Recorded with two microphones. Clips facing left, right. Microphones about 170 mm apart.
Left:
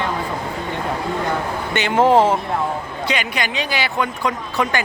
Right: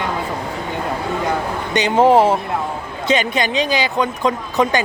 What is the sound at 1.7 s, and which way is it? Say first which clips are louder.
Speech: right 2 dB; 15° right (ahead or behind).